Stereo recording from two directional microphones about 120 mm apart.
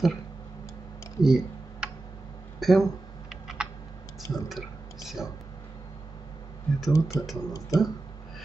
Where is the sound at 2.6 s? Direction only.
Centre (ahead or behind).